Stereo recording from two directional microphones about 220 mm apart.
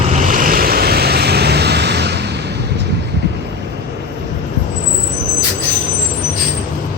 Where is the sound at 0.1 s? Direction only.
35° right (ahead or behind).